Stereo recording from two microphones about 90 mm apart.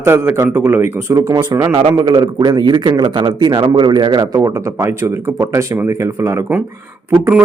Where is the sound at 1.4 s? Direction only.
45° right (ahead or behind).